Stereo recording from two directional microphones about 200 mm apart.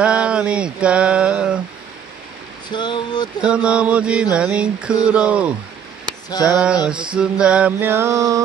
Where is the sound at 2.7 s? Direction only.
20° left (ahead or behind).